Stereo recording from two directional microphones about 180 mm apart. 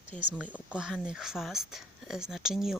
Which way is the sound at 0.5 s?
5° right (ahead or behind).